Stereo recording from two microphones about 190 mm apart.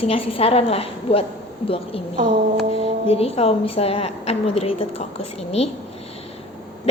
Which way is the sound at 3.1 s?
30° left (ahead or behind).